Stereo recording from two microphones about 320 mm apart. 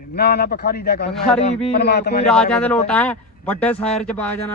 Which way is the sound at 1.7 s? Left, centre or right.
Left.